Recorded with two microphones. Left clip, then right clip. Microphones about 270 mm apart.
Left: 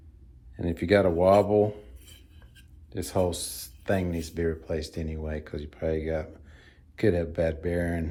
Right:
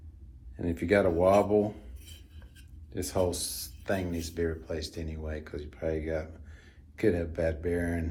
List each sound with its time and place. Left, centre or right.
0.5 s speech: left
2.9 s speech: left